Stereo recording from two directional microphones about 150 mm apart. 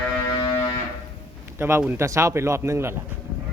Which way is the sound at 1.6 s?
15° right (ahead or behind).